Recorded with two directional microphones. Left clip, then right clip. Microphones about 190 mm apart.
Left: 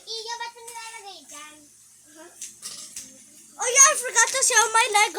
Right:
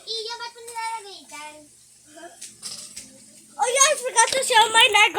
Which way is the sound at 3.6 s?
30° left (ahead or behind).